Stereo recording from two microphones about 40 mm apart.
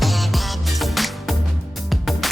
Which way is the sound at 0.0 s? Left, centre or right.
Centre.